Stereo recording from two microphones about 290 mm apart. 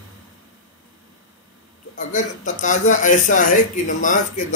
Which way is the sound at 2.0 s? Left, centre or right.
Left.